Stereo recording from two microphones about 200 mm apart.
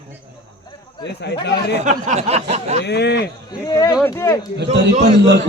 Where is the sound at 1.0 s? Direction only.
55° left (ahead or behind).